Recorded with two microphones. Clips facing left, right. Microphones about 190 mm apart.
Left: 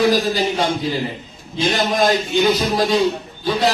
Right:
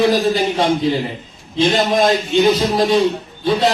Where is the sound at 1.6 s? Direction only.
30° right (ahead or behind).